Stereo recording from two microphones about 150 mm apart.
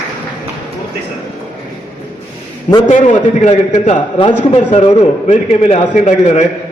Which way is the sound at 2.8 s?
50° left (ahead or behind).